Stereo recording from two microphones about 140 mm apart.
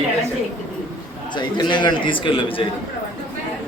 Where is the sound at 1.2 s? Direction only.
35° left (ahead or behind).